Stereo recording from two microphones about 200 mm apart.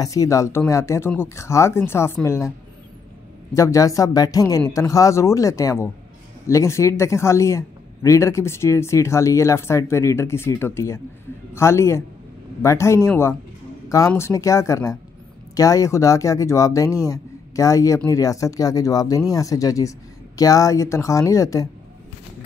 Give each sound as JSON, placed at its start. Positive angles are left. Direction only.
{"t": 0.0, "sound": "a man's voice", "side_deg": 15}
{"t": 3.5, "sound": "a man's voice", "side_deg": 15}